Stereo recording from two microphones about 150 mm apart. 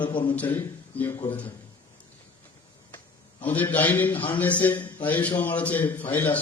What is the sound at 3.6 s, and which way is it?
A man's voice, 10° left (ahead or behind).